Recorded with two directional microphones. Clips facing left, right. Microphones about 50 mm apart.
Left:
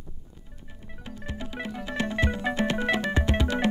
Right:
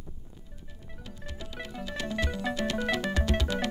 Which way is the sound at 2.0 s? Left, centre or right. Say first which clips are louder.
Left 5 dB; left.